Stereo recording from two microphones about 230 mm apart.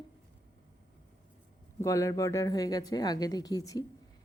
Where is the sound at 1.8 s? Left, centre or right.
Centre.